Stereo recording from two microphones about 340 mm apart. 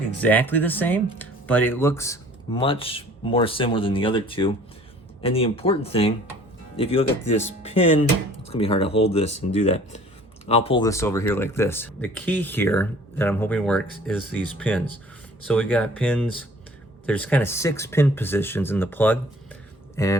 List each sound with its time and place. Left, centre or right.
0.2 s speech: centre